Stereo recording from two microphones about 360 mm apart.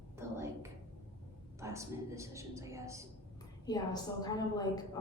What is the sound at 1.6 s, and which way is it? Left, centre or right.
A woman's voice, centre.